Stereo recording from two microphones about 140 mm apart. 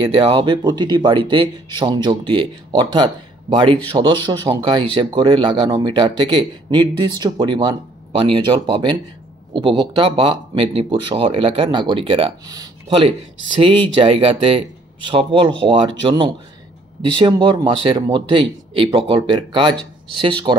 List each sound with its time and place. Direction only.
0.1 s speech: 35° right (ahead or behind)